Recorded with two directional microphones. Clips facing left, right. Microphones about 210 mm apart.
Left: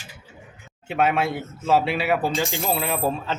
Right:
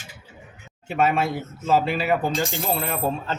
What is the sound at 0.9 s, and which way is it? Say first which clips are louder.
Speech: even; centre (ahead or behind).